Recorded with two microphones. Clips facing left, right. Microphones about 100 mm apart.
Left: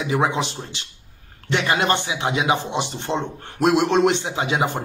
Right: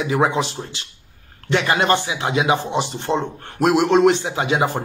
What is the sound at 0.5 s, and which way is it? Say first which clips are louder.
Speech: right 2 dB; 25° left (ahead or behind).